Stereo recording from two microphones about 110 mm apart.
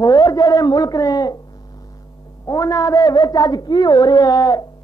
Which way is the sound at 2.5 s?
30° left (ahead or behind).